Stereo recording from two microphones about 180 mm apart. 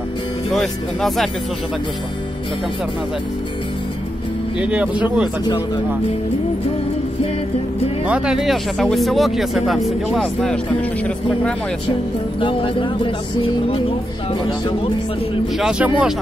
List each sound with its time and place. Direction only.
0.5 s speech: centre (ahead or behind)
4.6 s speech: 5° right (ahead or behind)
8.1 s speech: 5° right (ahead or behind)
12.4 s speech: 30° left (ahead or behind)
15.5 s speech: 5° right (ahead or behind)